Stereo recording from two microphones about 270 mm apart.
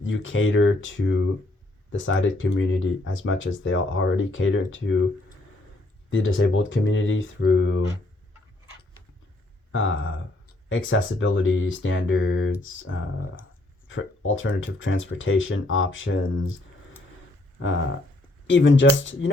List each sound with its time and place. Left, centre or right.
0.0 s speech: left
6.1 s speech: left
9.7 s speech: left
18.4 s speech: left